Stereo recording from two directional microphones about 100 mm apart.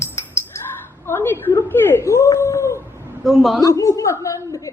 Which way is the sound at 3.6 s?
35° left (ahead or behind).